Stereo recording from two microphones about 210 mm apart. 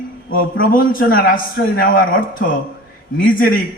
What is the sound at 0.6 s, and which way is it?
A man's voice, 40° left (ahead or behind).